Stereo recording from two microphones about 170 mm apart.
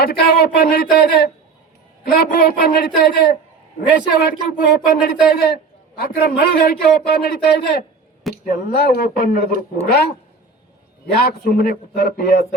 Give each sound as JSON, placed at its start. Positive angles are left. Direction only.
{"t": 0.0, "sound": "a man's voice", "side_deg": 70}